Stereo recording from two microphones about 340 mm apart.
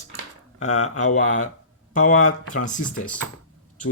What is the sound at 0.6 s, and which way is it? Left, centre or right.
Speech, left.